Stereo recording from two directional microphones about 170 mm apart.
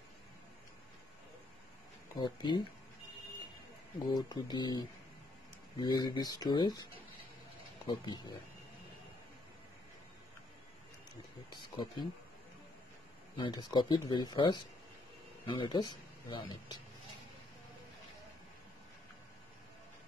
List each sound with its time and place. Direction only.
2.1 s speech: 25° left (ahead or behind)
4.1 s speech: 25° left (ahead or behind)
11.7 s speech: 25° left (ahead or behind)
13.4 s speech: 25° left (ahead or behind)
15.6 s speech: 25° left (ahead or behind)